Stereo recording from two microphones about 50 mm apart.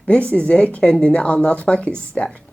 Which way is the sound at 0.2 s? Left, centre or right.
Left.